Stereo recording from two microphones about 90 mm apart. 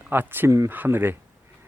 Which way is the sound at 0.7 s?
20° right (ahead or behind).